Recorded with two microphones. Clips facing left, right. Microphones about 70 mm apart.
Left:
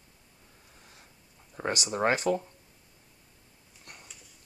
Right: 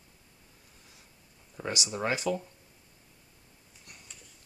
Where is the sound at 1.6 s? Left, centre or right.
Left.